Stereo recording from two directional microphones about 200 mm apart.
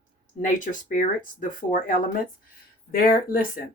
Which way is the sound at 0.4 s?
40° left (ahead or behind).